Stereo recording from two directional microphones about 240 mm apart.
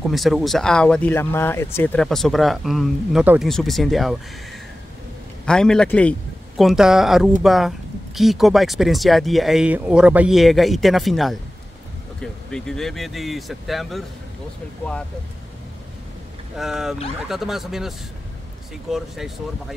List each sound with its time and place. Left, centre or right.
0.1 s speech: centre
5.4 s a man's voice: centre
16.5 s speech: centre